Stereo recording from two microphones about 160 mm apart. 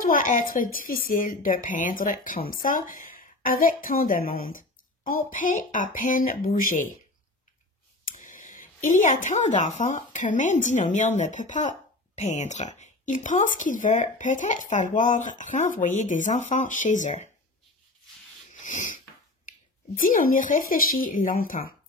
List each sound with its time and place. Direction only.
0.0 s a woman's voice: 60° left (ahead or behind)
8.0 s a woman's voice: 55° left (ahead or behind)
18.6 s a sound: 50° left (ahead or behind)
20.0 s a woman's voice: 60° left (ahead or behind)